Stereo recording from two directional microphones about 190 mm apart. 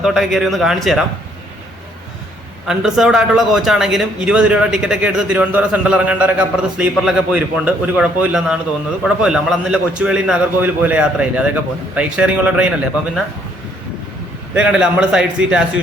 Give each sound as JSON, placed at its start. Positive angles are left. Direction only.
{"t": 0.0, "sound": "a man's voice", "side_deg": 0}
{"t": 2.6, "sound": "a man's voice", "side_deg": 0}
{"t": 14.5, "sound": "a man's voice", "side_deg": -5}